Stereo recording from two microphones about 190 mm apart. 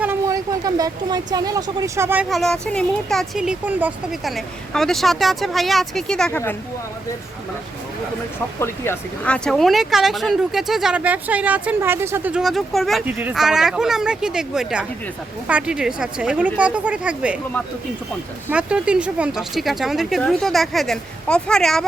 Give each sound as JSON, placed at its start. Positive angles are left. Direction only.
{"t": 0.0, "sound": "speech", "side_deg": -15}
{"t": 2.3, "sound": "speech", "side_deg": 0}
{"t": 8.5, "sound": "speech", "side_deg": 15}
{"t": 18.4, "sound": "speech", "side_deg": -5}